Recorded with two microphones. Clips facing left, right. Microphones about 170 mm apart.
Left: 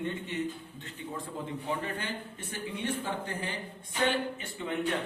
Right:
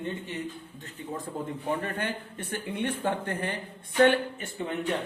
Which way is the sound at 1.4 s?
45° right (ahead or behind).